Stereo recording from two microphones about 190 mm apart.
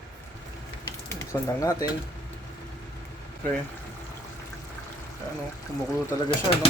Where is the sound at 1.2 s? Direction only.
15° left (ahead or behind).